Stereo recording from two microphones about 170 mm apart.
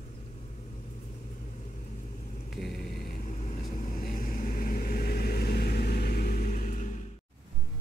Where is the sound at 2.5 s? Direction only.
Centre (ahead or behind).